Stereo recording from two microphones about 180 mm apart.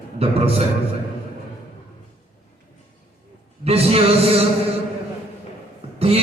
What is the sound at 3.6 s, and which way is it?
Speech, 35° right (ahead or behind).